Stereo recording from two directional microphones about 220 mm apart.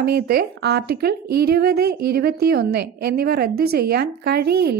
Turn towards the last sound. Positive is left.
turn(degrees=-45)  # may be behind; listen again after turning